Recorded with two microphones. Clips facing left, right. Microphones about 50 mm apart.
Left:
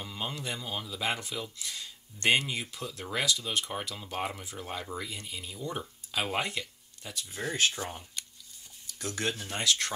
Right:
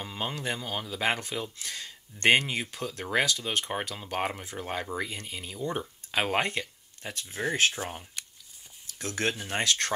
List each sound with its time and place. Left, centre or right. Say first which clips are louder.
0.0 s a sound: right 3 dB; right
0.4 s speech: right 4 dB; right
1.6 s speech: right 2 dB; right
7.7 s speech: right 2 dB; right
8.9 s speech: right 3 dB; right